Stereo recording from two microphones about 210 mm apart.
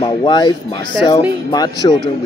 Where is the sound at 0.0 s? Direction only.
20° left (ahead or behind).